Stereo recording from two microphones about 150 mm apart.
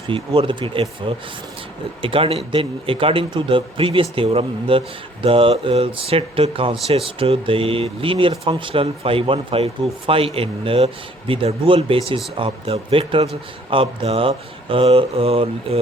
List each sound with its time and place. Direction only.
0.1 s speech: 35° right (ahead or behind)